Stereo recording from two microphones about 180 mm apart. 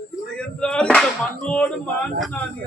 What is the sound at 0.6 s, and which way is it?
Speech, 5° left (ahead or behind).